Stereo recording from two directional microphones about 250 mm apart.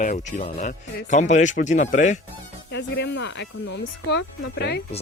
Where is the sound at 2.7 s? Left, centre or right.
Left.